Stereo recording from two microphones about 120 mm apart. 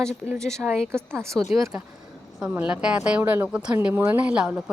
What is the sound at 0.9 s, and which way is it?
Speech, 20° right (ahead or behind).